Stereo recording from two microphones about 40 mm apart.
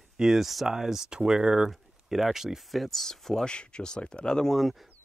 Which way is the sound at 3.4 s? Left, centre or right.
Left.